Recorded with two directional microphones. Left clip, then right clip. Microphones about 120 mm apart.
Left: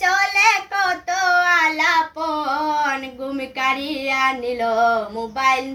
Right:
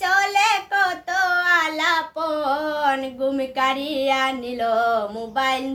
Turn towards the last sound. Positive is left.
turn(degrees=-45)  # may be behind; listen again after turning